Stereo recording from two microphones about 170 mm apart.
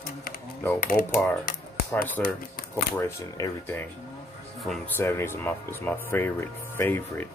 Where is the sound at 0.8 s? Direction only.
55° left (ahead or behind).